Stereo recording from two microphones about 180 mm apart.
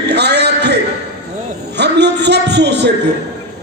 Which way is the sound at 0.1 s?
70° right (ahead or behind).